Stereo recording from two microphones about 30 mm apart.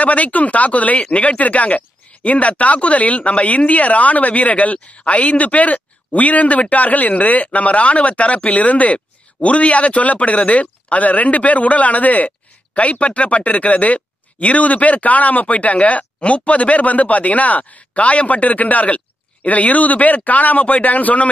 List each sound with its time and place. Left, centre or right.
0.0 s speech: left
4.9 s speech: left
13.0 s speech: left